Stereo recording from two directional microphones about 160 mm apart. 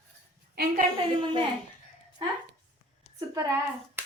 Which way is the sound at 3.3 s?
20° right (ahead or behind).